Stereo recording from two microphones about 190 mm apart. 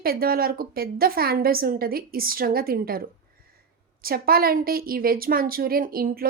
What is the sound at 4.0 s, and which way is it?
Speech, 50° right (ahead or behind).